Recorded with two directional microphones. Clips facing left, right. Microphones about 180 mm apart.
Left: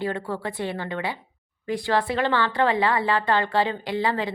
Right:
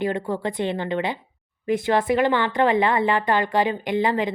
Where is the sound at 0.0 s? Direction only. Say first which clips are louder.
Right 4 dB; 15° right (ahead or behind).